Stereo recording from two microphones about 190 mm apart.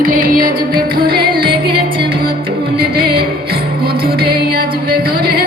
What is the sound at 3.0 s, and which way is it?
Music, 55° right (ahead or behind).